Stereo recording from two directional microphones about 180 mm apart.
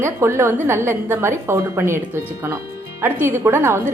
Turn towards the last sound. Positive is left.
turn(degrees=-15)  # may be behind; listen again after turning